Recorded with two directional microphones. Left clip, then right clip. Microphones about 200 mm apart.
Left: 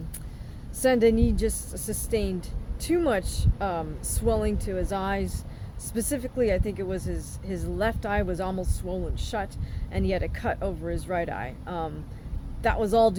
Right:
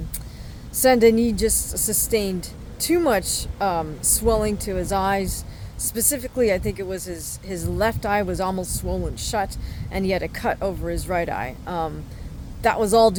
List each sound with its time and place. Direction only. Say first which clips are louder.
0.8 s a woman's voice: right 6 dB; 25° right (ahead or behind)